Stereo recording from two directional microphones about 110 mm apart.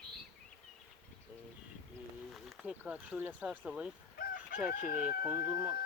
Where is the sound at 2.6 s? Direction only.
10° right (ahead or behind).